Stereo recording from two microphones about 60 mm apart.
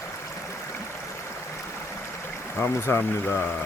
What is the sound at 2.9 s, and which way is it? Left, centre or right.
Speech, left.